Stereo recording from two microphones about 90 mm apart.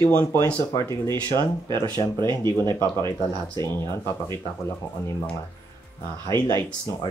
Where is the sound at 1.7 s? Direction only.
50° right (ahead or behind).